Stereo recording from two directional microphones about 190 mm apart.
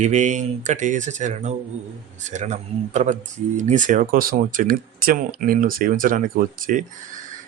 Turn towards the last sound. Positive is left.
turn(degrees=-45)  # may be behind; listen again after turning